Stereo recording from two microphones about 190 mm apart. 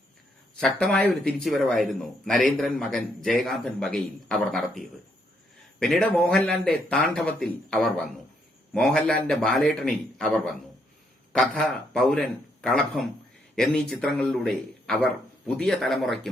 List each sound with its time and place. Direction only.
0.6 s a man's voice: 5° left (ahead or behind)
5.8 s a man's voice: 5° left (ahead or behind)